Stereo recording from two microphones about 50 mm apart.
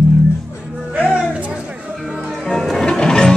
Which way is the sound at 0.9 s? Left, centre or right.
Right.